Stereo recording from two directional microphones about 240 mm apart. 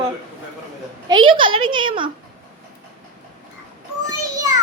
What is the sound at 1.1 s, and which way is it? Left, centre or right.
A woman's voice, centre.